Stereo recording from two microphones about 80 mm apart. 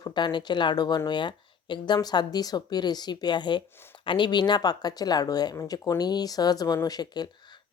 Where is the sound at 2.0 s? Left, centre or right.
Left.